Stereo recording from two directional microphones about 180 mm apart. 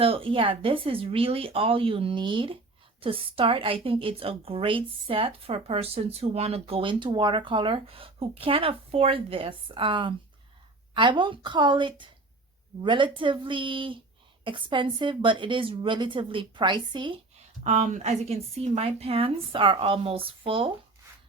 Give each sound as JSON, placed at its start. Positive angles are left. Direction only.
{"t": 0.0, "sound": "a woman's voice", "side_deg": -30}
{"t": 17.6, "sound": "a woman's voice", "side_deg": -40}